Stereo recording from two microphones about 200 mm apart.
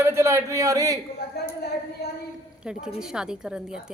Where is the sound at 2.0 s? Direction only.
55° left (ahead or behind).